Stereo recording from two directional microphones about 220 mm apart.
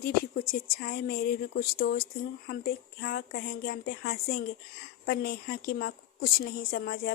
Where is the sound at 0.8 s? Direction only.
40° left (ahead or behind).